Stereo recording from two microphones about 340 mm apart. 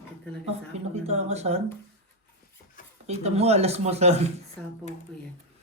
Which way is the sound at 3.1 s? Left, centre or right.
Centre.